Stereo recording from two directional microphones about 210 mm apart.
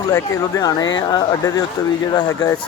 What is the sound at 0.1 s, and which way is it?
Speech, 15° left (ahead or behind).